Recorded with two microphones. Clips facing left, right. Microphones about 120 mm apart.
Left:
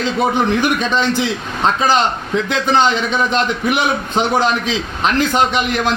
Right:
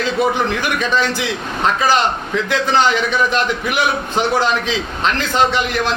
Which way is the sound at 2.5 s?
20° left (ahead or behind).